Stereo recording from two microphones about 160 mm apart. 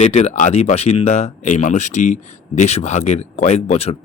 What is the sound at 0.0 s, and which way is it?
Speech, 40° left (ahead or behind).